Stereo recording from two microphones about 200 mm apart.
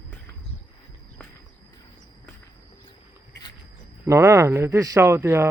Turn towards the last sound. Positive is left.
turn(degrees=-10)  # may be behind; listen again after turning